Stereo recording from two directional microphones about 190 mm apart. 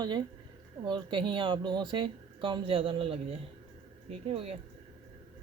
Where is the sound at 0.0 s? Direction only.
25° right (ahead or behind).